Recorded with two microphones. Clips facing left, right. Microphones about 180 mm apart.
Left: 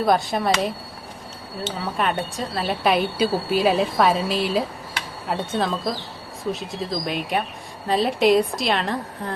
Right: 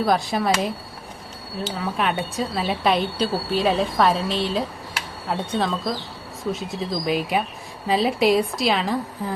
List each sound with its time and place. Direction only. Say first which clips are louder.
0.0 s speech: left 1 dB; centre (ahead or behind)